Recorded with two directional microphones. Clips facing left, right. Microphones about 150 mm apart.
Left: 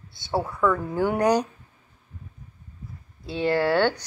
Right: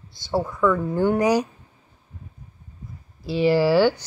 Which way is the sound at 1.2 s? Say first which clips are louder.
Right 1 dB; 10° right (ahead or behind).